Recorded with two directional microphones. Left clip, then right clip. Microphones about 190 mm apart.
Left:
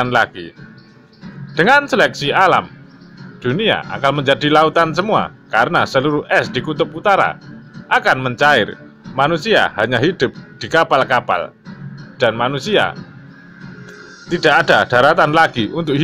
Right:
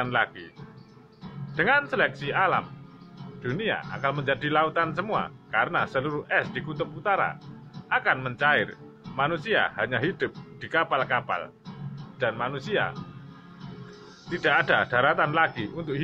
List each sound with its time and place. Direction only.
0.0 s speech: 45° left (ahead or behind)
1.5 s speech: 45° left (ahead or behind)
14.3 s speech: 45° left (ahead or behind)